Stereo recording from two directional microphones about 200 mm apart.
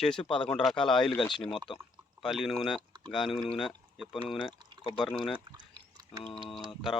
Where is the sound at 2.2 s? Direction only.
Centre (ahead or behind).